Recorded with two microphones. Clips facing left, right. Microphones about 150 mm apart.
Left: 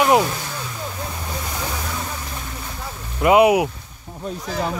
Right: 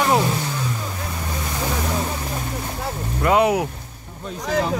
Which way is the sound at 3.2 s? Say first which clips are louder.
Left 4 dB; 10° left (ahead or behind).